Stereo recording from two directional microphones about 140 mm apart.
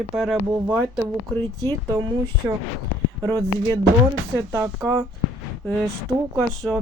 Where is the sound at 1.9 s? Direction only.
30° right (ahead or behind).